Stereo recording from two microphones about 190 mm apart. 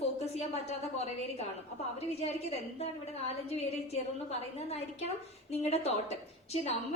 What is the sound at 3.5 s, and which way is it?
A woman's voice, 35° left (ahead or behind).